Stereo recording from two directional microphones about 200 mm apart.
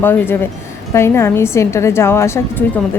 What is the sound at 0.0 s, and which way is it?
A woman's voice, 10° left (ahead or behind).